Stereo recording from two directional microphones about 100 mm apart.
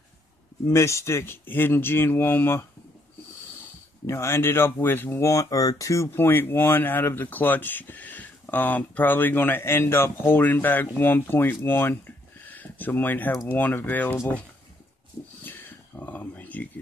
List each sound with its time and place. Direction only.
0.7 s speech: 30° left (ahead or behind)
4.0 s speech: 25° left (ahead or behind)
12.4 s a sound: 15° left (ahead or behind)
13.5 s speech: 20° left (ahead or behind)
16.0 s speech: 15° left (ahead or behind)